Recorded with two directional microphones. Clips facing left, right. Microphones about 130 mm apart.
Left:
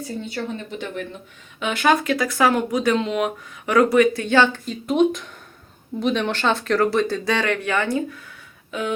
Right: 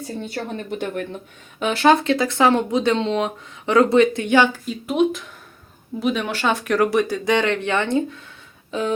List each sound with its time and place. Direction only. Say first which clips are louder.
0.3 s speech: right 4 dB; 50° right (ahead or behind)
1.5 s speech: right 3 dB; 35° right (ahead or behind)